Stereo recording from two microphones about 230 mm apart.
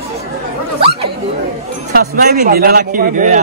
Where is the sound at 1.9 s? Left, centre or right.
Right.